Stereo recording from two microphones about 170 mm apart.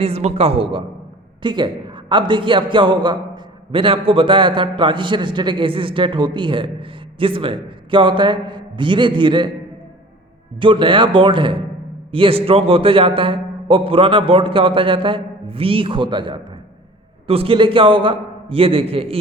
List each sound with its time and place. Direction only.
0.0 s a man's voice: 40° right (ahead or behind)
10.6 s a man's voice: 30° right (ahead or behind)